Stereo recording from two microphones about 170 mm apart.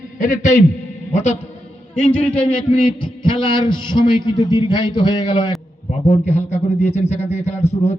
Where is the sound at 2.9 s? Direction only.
30° left (ahead or behind).